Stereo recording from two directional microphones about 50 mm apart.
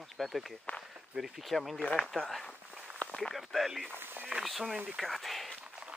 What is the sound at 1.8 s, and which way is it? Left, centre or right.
Speech, left.